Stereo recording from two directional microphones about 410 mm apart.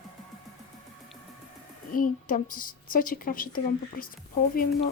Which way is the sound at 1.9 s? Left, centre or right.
Centre.